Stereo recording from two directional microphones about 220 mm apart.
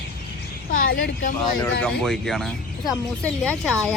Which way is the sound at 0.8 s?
60° left (ahead or behind).